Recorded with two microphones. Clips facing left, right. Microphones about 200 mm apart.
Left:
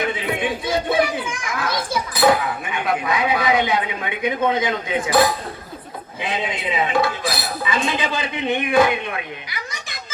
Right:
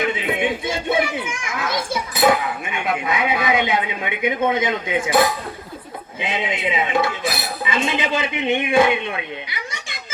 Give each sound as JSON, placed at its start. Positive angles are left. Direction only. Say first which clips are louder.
{"t": 0.0, "sound": "a child's voice", "louder": "right 1 dB", "side_deg": -20}